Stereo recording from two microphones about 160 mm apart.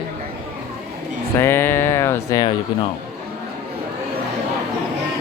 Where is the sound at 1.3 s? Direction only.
15° left (ahead or behind).